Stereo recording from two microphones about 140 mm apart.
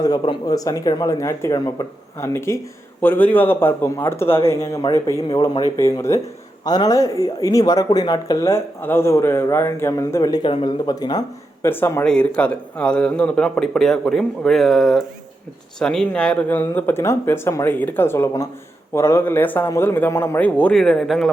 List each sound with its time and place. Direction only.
0.0 s speech: 30° left (ahead or behind)
11.6 s a man's voice: 15° left (ahead or behind)